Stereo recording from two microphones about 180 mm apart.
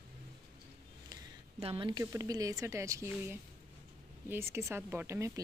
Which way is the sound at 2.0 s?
15° right (ahead or behind).